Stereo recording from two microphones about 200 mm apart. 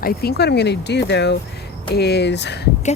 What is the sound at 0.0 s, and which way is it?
Speech, 50° left (ahead or behind).